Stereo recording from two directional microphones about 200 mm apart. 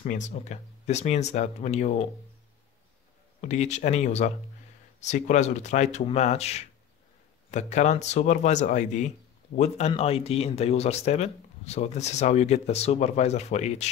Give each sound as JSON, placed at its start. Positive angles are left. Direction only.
{"t": 0.0, "sound": "speech", "side_deg": 35}
{"t": 3.3, "sound": "speech", "side_deg": 35}